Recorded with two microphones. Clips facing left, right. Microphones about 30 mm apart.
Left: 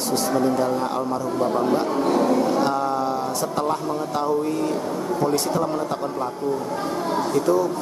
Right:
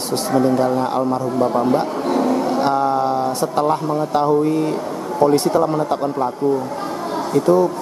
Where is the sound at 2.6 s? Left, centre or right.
Right.